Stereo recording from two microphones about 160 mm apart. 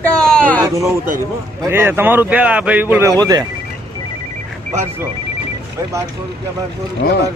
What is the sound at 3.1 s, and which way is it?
Speech, 25° right (ahead or behind).